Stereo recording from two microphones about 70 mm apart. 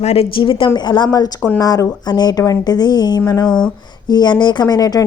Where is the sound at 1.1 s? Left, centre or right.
Left.